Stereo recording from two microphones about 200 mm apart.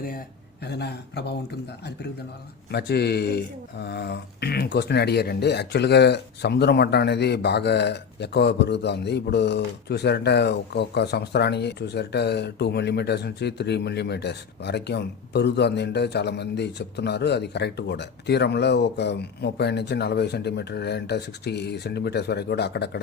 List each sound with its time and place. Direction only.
0.6 s speech: 55° left (ahead or behind)
2.7 s speech: 55° left (ahead or behind)